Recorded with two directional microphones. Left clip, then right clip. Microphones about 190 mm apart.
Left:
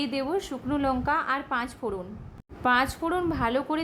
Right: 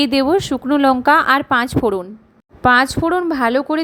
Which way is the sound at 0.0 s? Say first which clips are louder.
Right 13 dB; 45° right (ahead or behind).